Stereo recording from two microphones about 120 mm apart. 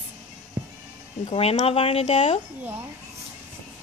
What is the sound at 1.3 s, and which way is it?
A woman's voice, 55° left (ahead or behind).